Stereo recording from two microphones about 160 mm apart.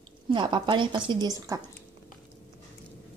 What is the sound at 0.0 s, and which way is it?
A woman's voice, 30° right (ahead or behind).